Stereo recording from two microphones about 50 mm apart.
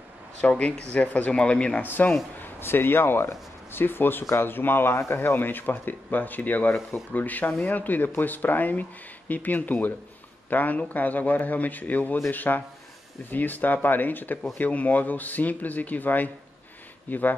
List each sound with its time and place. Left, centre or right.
0.4 s a man's voice: left
1.8 s a man's voice: left
2.6 s a man's voice: left